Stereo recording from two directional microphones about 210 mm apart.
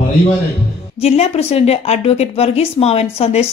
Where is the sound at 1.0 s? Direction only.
30° left (ahead or behind).